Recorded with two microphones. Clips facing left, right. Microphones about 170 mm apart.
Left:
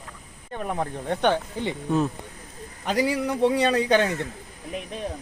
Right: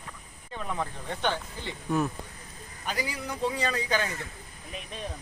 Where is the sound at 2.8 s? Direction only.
75° left (ahead or behind).